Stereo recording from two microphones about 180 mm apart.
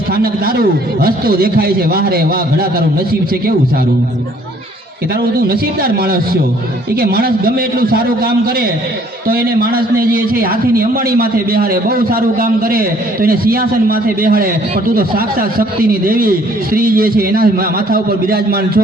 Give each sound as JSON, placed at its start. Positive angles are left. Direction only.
{"t": 0.2, "sound": "a man's voice", "side_deg": -55}
{"t": 5.5, "sound": "a man's voice", "side_deg": -60}